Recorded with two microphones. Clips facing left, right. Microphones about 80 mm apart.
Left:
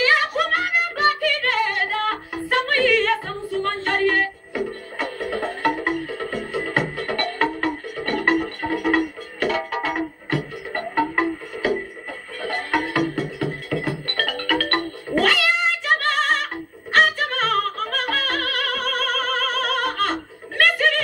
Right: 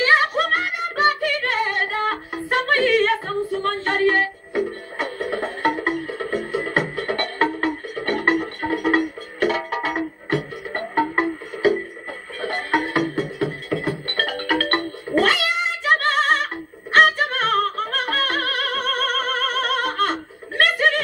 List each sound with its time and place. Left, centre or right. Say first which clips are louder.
0.0 s music: right 2 dB; right
3.8 s a sound: right 2 dB; right
5.0 s music: even; right